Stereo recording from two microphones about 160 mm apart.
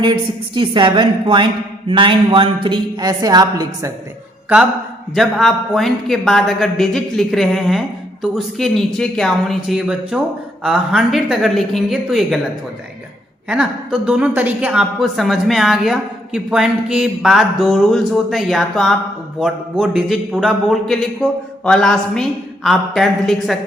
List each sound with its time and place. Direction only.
0.0 s a woman's voice: 30° right (ahead or behind)
5.1 s a woman's voice: centre (ahead or behind)
13.5 s a woman's voice: 5° right (ahead or behind)